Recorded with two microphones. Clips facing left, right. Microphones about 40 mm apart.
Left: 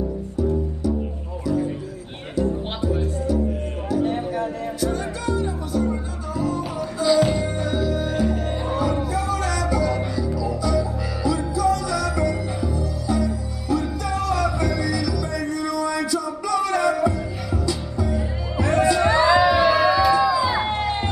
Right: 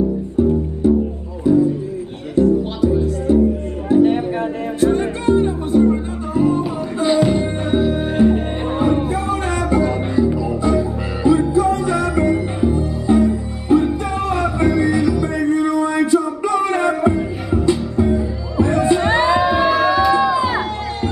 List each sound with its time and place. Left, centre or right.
0.4 s music: right
18.6 s music: left
18.9 s music: right
19.4 s music: left
20.1 s music: right